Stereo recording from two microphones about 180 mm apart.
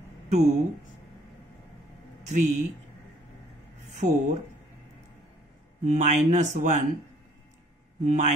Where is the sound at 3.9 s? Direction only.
40° right (ahead or behind).